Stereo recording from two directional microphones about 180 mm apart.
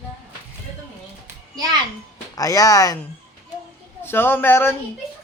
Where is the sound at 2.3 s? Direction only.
20° left (ahead or behind).